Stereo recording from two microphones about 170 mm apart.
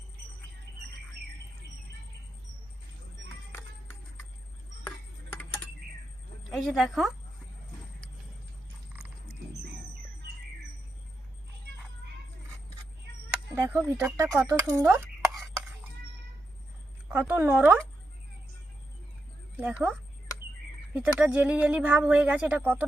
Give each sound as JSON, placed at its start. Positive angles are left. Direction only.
{"t": 6.5, "sound": "a woman's voice", "side_deg": 0}
{"t": 13.3, "sound": "a sound", "side_deg": -15}
{"t": 13.9, "sound": "speech", "side_deg": -10}
{"t": 17.1, "sound": "speech", "side_deg": -10}
{"t": 19.5, "sound": "speech", "side_deg": -10}